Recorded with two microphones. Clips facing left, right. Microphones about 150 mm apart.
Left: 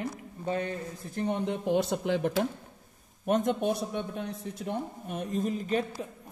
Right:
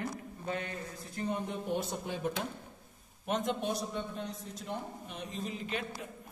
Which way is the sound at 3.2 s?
50° left (ahead or behind).